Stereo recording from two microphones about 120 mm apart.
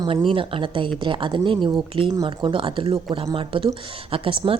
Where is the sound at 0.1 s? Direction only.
45° right (ahead or behind).